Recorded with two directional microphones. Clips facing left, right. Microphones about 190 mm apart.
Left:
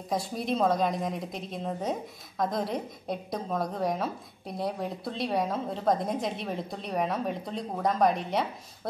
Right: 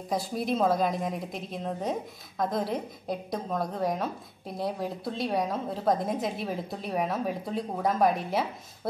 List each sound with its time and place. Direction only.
0.1 s a woman's voice: centre (ahead or behind)